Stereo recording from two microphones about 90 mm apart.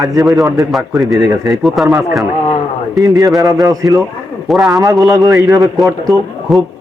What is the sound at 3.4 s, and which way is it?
Speech, 45° right (ahead or behind).